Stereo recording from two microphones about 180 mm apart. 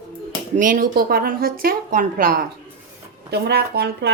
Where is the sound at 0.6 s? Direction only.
50° right (ahead or behind).